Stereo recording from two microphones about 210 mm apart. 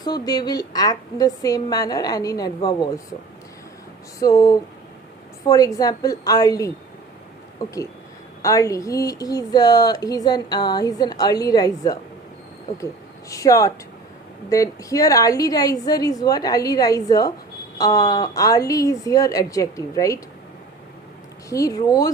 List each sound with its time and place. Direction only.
0.0 s speech: 20° left (ahead or behind)
4.2 s speech: 15° left (ahead or behind)
21.5 s speech: 15° left (ahead or behind)